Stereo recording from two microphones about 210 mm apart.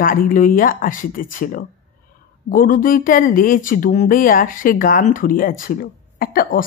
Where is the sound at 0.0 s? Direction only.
40° left (ahead or behind).